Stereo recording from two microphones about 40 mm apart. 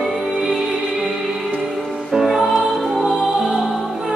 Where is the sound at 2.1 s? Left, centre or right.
Centre.